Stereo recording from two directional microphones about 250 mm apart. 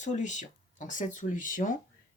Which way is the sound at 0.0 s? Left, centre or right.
Left.